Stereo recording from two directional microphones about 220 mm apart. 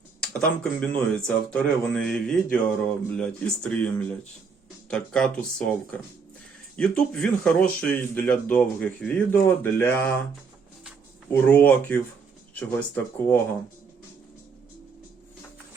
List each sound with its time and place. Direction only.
0.2 s speech: 5° left (ahead or behind)
11.3 s speech: 10° left (ahead or behind)